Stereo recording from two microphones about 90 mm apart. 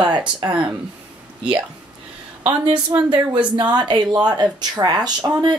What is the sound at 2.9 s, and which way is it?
Speech, 30° right (ahead or behind).